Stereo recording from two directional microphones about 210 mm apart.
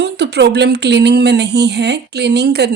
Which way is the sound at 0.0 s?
55° right (ahead or behind).